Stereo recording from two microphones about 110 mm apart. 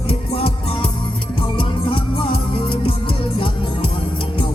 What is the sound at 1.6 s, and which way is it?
Music, 55° left (ahead or behind).